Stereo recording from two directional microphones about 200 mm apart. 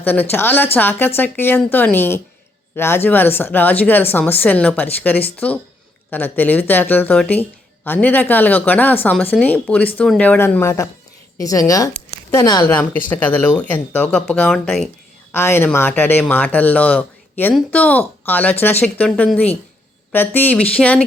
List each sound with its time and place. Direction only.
0.0 s speech: 10° left (ahead or behind)